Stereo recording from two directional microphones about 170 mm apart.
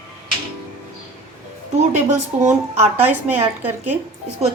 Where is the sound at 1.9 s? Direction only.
40° right (ahead or behind).